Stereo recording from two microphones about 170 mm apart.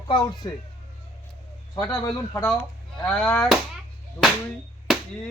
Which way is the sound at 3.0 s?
10° left (ahead or behind).